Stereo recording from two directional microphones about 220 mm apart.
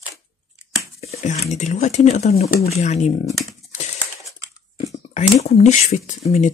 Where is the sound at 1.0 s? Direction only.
30° left (ahead or behind).